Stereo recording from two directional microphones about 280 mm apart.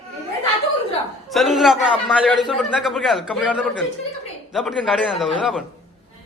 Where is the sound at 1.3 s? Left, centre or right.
Centre.